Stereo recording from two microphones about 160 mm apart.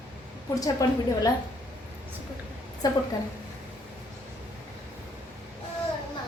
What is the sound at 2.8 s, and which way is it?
Speech, 25° left (ahead or behind).